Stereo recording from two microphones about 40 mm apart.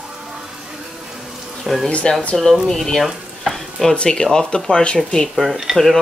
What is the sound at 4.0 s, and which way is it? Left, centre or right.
Speech, left.